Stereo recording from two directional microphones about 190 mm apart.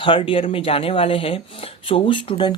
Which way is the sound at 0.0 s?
25° left (ahead or behind).